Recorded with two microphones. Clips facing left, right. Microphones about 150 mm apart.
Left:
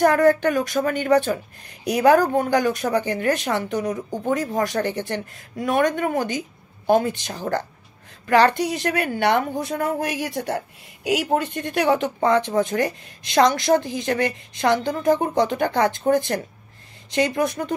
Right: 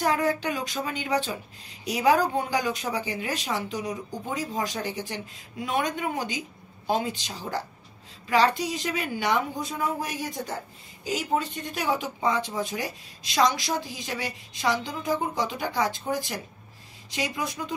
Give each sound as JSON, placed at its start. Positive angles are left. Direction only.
{"t": 0.0, "sound": "a woman's voice", "side_deg": 55}